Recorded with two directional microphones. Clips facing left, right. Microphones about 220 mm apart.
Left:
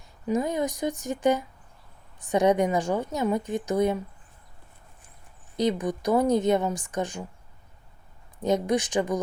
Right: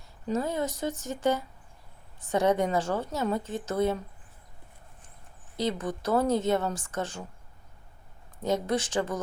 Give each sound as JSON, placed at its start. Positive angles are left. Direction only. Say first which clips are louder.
{"t": 0.3, "sound": "a woman's voice", "louder": "left 3 dB", "side_deg": 15}
{"t": 5.5, "sound": "a woman's voice", "louder": "left 5 dB", "side_deg": 15}
{"t": 8.4, "sound": "a woman's voice", "louder": "left 4 dB", "side_deg": 15}